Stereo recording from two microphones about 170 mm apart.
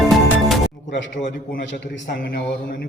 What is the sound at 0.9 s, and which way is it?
Speech, 90° left.